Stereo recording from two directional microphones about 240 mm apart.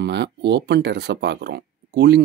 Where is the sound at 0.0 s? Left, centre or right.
Right.